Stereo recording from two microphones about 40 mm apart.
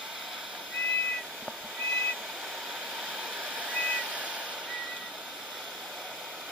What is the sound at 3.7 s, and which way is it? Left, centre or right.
Vehicle, left.